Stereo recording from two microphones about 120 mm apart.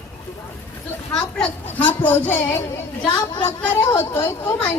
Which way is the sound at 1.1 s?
5° left (ahead or behind).